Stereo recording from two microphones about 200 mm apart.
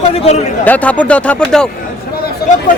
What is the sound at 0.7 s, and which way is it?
Speech, 5° left (ahead or behind).